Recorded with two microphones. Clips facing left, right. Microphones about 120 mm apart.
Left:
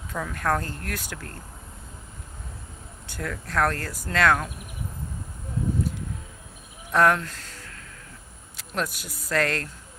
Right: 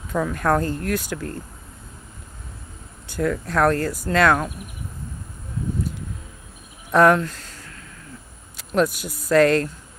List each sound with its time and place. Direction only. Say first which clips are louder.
0.1 s speech: right 6 dB; 20° right (ahead or behind)
3.2 s speech: right 6 dB; 15° right (ahead or behind)
6.9 s speech: right 5 dB; 15° right (ahead or behind)
8.5 s a sound: right 10 dB; 10° right (ahead or behind)
9.3 s speech: right 10 dB; 15° right (ahead or behind)